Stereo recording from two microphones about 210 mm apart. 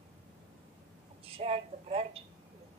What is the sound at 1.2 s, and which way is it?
A woman's voice, 30° right (ahead or behind).